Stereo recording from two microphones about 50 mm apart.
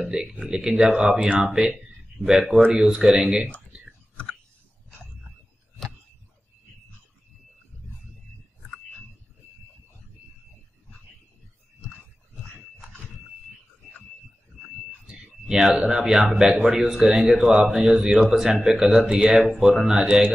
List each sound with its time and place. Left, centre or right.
0.0 s speech: centre
1.7 s a sound: centre
2.9 s speech: centre
15.0 s speech: centre